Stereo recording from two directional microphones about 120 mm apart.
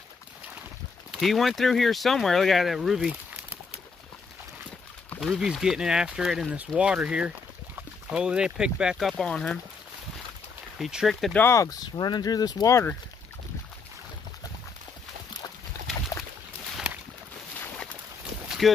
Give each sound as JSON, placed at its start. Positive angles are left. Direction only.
{"t": 1.1, "sound": "speech", "side_deg": 0}
{"t": 5.2, "sound": "speech", "side_deg": -5}
{"t": 9.1, "sound": "speech", "side_deg": 5}
{"t": 10.8, "sound": "speech", "side_deg": -5}
{"t": 11.3, "sound": "speech", "side_deg": 25}
{"t": 16.7, "sound": "boat", "side_deg": -10}
{"t": 18.6, "sound": "speech", "side_deg": 0}